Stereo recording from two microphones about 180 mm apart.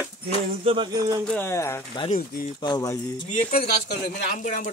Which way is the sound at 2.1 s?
45° left (ahead or behind).